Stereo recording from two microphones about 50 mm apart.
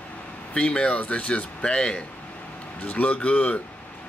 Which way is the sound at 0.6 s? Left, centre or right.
Left.